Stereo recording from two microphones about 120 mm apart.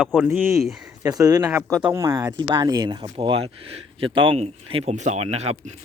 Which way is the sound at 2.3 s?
35° right (ahead or behind).